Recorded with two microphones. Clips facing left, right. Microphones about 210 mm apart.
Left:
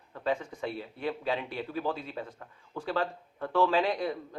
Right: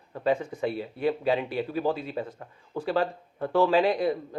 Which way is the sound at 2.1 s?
25° right (ahead or behind).